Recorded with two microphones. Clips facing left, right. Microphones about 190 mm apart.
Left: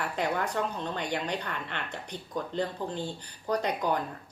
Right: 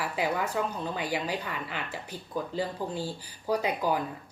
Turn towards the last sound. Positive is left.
turn(degrees=-5)  # may be behind; listen again after turning